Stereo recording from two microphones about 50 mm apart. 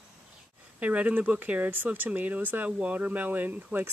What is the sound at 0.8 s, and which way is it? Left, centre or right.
Speech, right.